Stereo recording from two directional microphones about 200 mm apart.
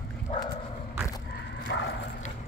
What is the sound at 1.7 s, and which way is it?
Dog, 60° left (ahead or behind).